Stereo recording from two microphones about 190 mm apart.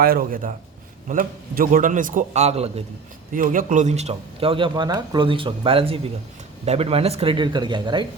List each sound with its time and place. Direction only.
0.0 s a man's voice: 50° right (ahead or behind); by 2.8 s 35° right (ahead or behind)
3.3 s speech: 45° right (ahead or behind); by 8.0 s 25° right (ahead or behind)